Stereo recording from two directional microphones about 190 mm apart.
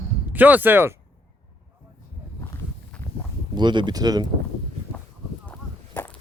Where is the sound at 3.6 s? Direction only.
25° right (ahead or behind).